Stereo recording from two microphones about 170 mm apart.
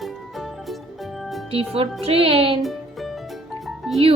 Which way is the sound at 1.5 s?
35° right (ahead or behind).